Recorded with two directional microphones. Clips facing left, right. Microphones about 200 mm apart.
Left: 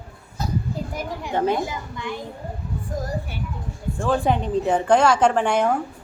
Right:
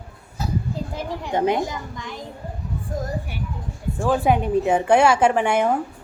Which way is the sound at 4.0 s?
5° right (ahead or behind).